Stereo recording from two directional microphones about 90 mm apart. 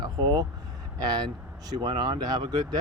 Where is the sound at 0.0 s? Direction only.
55° right (ahead or behind).